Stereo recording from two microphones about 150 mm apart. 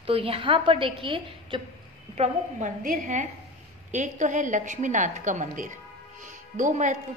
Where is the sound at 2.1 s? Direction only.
45° right (ahead or behind).